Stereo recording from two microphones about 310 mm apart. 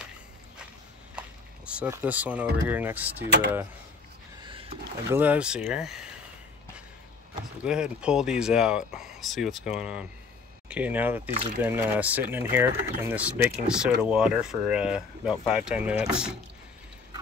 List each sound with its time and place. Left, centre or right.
1.7 s speech: centre
3.3 s speech: right
4.4 s a sound: centre
5.1 s speech: centre
7.6 s speech: centre